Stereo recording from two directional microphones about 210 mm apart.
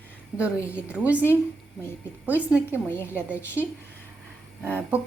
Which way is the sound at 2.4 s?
10° right (ahead or behind).